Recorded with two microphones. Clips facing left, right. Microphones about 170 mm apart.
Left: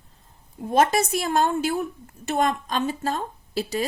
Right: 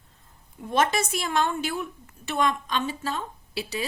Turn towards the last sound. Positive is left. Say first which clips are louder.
# left 4 dB
turn(degrees=45)  # may be behind; listen again after turning